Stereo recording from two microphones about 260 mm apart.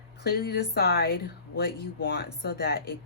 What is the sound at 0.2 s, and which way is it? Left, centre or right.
Speech, left.